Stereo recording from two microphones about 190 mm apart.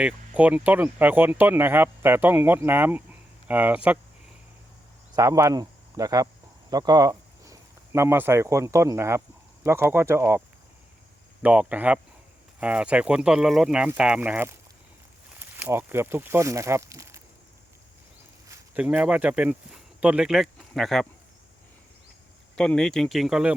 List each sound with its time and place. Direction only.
0.0 s speech: 5° right (ahead or behind)
5.1 s speech: 15° right (ahead or behind)
11.4 s speech: 5° right (ahead or behind)
18.4 s speech: 10° right (ahead or behind)
22.5 s speech: 5° left (ahead or behind)